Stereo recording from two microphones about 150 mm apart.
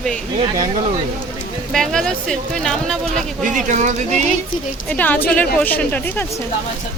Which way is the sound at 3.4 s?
55° right (ahead or behind).